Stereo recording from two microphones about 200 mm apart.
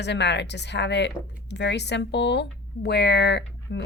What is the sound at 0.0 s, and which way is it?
Speech, 60° left (ahead or behind).